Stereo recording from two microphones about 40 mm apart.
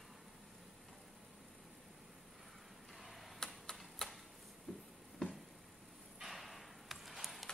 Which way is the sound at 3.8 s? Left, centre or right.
Centre.